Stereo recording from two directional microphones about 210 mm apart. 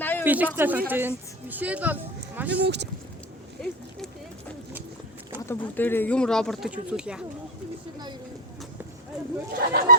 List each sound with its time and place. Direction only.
0.0 s a sound: 10° left (ahead or behind)
0.3 s a woman's voice: 10° right (ahead or behind)
2.6 s speech: 55° right (ahead or behind)
3.6 s speech: 5° left (ahead or behind)
5.5 s speech: 10° left (ahead or behind)
9.5 s speech: 45° right (ahead or behind)